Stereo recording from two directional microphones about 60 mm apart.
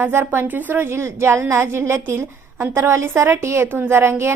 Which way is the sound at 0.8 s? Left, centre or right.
Right.